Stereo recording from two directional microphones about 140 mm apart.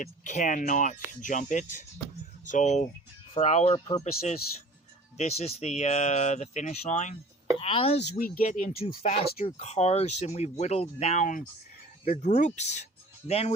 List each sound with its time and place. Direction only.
0.0 s speech: 60° left (ahead or behind)
7.6 s speech: 45° left (ahead or behind)
8.1 s speech: 75° left (ahead or behind)
9.0 s speech: 50° left (ahead or behind)